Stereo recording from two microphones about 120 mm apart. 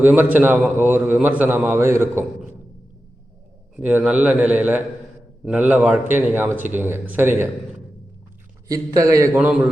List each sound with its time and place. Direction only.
0.0 s a man's voice: 15° right (ahead or behind)
3.8 s a man's voice: 10° right (ahead or behind)
8.6 s a man's voice: 30° right (ahead or behind)
9.3 s a man's voice: 15° right (ahead or behind)